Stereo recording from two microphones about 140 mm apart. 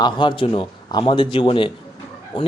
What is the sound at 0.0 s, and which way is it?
Speech, 35° left (ahead or behind).